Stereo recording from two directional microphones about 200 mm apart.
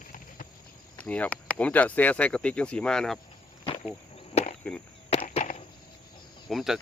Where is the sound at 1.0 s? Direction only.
5° left (ahead or behind).